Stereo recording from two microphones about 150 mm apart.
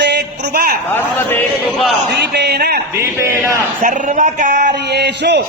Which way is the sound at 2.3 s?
90° right.